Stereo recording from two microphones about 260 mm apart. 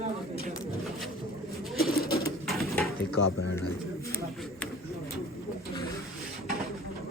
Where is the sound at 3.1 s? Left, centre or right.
Left.